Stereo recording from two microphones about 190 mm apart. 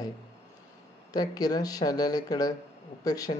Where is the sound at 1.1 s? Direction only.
20° left (ahead or behind).